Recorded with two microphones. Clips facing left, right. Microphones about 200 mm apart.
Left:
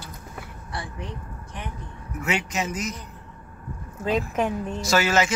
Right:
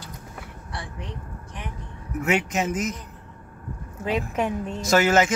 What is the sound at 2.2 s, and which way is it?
Speech, 50° right (ahead or behind).